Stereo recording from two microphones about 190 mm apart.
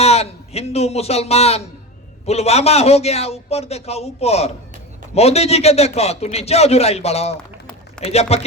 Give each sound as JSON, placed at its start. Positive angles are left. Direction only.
{"t": 0.0, "sound": "a man's voice", "side_deg": 35}